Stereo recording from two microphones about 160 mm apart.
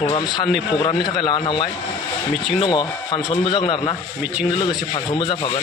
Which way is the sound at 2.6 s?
25° left (ahead or behind).